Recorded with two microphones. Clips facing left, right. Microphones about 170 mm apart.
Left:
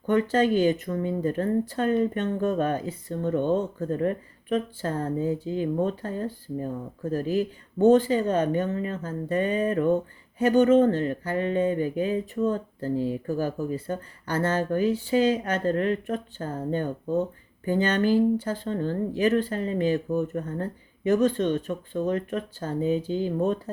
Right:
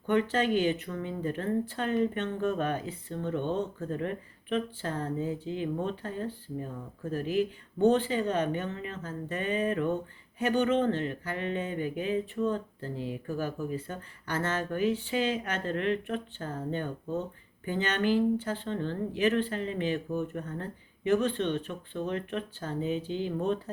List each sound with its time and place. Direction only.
0.1 s speech: 40° left (ahead or behind)